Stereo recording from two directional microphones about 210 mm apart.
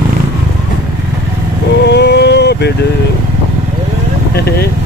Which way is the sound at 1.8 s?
50° left (ahead or behind).